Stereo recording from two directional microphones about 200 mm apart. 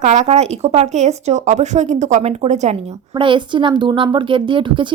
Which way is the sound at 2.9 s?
20° right (ahead or behind).